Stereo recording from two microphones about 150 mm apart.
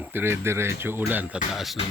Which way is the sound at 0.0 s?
15° right (ahead or behind).